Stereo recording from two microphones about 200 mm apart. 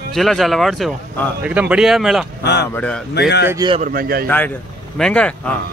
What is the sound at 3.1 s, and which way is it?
Speech, 55° left (ahead or behind).